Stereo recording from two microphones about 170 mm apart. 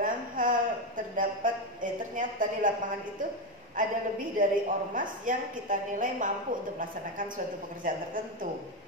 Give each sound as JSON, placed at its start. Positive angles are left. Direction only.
{"t": 0.0, "sound": "a sound", "side_deg": -50}
{"t": 3.8, "sound": "a woman's voice", "side_deg": -50}
{"t": 7.8, "sound": "a woman's voice", "side_deg": -50}